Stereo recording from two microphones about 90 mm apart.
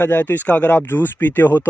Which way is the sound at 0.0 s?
20° left (ahead or behind).